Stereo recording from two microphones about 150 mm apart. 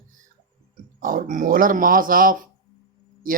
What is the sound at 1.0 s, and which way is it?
Speech, 65° right (ahead or behind).